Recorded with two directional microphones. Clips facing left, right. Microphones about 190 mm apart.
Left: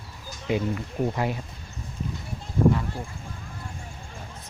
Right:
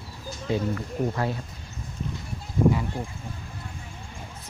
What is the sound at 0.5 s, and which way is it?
Speech, 15° left (ahead or behind).